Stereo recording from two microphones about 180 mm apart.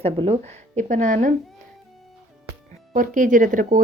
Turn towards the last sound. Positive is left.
turn(degrees=-45)  # may be behind; listen again after turning